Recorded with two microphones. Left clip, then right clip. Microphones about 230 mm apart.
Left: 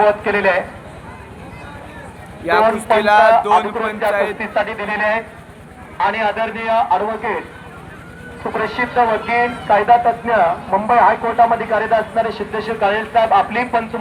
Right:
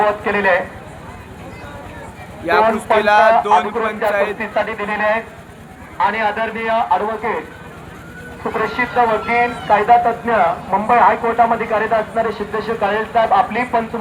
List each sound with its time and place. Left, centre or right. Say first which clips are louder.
0.0 s speech: left 2 dB; left
2.6 s speech: even; left
3.0 s a man's voice: left 1 dB; centre
4.4 s speech: even; left
8.4 s speech: right 1 dB; left